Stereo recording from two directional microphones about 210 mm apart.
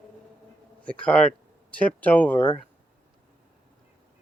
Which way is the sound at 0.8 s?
5° left (ahead or behind).